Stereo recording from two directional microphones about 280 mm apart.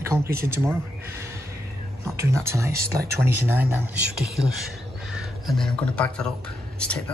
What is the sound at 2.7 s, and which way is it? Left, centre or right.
Speech, right.